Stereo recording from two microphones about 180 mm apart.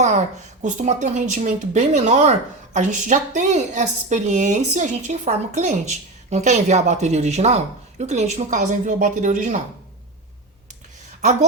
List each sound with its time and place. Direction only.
0.0 s a woman's voice: 45° right (ahead or behind)